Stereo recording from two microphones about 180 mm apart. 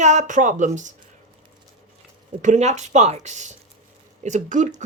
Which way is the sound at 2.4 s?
40° right (ahead or behind).